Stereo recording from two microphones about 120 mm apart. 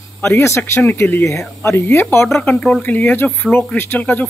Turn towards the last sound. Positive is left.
turn(degrees=15)  # may be behind; listen again after turning